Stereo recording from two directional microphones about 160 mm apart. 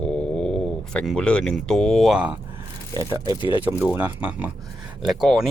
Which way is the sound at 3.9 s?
10° right (ahead or behind).